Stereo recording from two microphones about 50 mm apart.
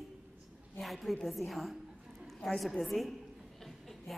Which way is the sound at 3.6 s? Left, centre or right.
Centre.